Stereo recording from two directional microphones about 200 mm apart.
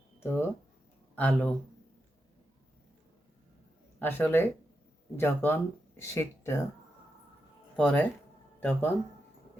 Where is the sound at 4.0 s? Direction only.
10° left (ahead or behind).